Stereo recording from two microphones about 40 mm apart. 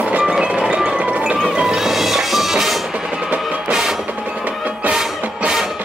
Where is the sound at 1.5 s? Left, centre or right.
Centre.